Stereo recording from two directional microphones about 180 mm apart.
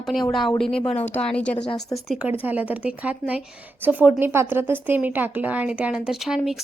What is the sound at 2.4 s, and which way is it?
A woman's voice, 10° right (ahead or behind).